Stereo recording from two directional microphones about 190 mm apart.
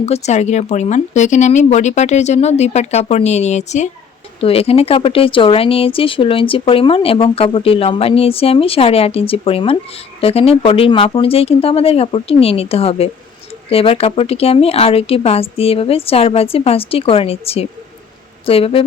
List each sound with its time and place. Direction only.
0.0 s a woman's voice: 35° left (ahead or behind)